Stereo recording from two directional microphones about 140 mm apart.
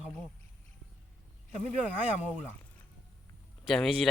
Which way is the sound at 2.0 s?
10° right (ahead or behind).